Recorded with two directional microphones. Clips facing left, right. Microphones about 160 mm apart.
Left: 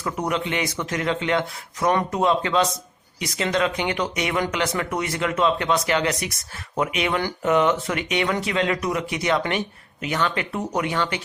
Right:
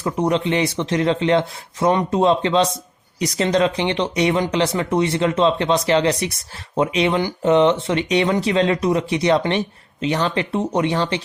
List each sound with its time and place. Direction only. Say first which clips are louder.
0.0 s speech: right 6 dB; 30° right (ahead or behind)